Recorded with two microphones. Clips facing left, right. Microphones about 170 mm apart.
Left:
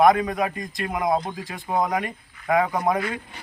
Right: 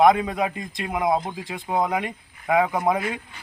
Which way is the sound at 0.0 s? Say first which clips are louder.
Even; 20° right (ahead or behind).